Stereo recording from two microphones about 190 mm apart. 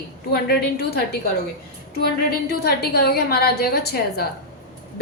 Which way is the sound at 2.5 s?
55° left (ahead or behind).